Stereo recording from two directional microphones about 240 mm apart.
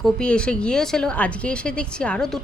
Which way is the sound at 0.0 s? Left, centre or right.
Centre.